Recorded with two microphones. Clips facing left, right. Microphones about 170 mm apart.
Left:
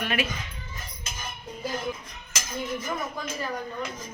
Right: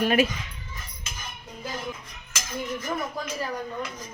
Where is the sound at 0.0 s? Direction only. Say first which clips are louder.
Right 7 dB; 40° right (ahead or behind).